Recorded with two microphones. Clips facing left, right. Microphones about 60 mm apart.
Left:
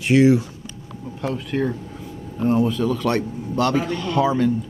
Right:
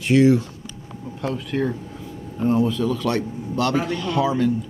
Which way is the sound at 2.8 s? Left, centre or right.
Left.